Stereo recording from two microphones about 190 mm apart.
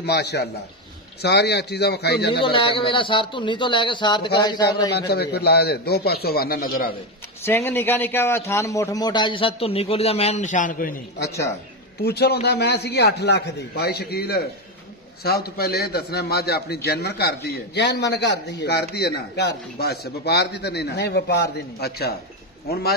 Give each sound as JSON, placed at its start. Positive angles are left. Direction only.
{"t": 0.0, "sound": "a man's voice", "side_deg": 60}
{"t": 2.4, "sound": "a man's voice", "side_deg": 25}
{"t": 4.9, "sound": "a man's voice", "side_deg": 60}
{"t": 7.4, "sound": "a man's voice", "side_deg": 10}
{"t": 11.2, "sound": "speech", "side_deg": 15}
{"t": 12.0, "sound": "a man's voice", "side_deg": 60}